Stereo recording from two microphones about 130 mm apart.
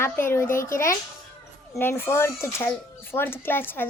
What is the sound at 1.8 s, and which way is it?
Speech, 15° left (ahead or behind).